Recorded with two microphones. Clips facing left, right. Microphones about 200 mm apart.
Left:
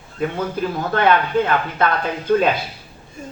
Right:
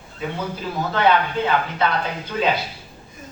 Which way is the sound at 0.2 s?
50° left (ahead or behind).